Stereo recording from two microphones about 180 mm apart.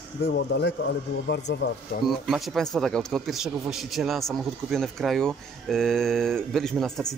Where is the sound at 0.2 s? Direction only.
70° left (ahead or behind).